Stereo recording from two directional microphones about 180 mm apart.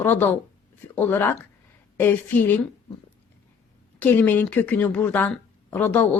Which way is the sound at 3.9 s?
10° left (ahead or behind).